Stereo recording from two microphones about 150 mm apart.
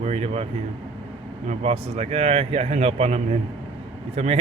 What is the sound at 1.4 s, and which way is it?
Speech, 45° right (ahead or behind).